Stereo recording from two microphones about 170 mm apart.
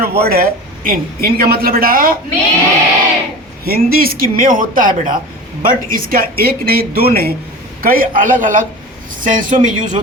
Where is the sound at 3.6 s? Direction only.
60° right (ahead or behind).